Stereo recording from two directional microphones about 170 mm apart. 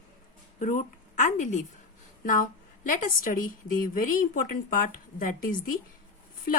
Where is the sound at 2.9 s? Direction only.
50° left (ahead or behind).